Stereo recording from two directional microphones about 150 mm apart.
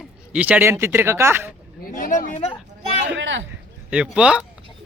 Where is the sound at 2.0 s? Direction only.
65° left (ahead or behind).